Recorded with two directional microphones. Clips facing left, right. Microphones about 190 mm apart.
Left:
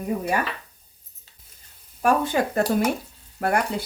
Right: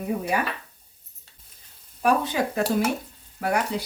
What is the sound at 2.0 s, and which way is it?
Speech, 45° left (ahead or behind).